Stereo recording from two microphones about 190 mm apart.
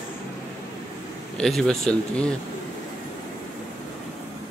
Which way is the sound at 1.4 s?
5° left (ahead or behind).